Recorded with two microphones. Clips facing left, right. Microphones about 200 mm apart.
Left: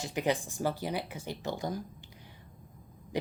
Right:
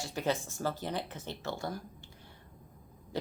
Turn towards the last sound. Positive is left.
turn(degrees=15)  # may be behind; listen again after turning